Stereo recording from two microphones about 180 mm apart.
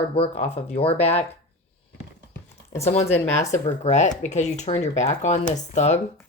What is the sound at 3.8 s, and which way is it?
Speech, 40° left (ahead or behind).